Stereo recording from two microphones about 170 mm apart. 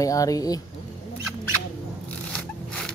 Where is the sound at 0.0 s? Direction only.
20° left (ahead or behind).